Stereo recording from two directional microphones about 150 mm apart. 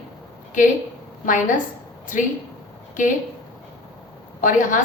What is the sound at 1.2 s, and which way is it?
Speech, 60° left (ahead or behind).